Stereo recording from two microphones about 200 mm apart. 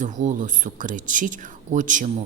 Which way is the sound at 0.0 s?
40° right (ahead or behind).